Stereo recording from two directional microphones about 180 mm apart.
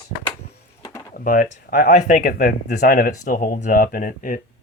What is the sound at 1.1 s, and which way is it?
Speech, 50° left (ahead or behind).